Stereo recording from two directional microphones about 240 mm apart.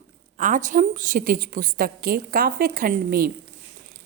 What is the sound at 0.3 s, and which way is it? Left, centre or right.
A woman's voice, right.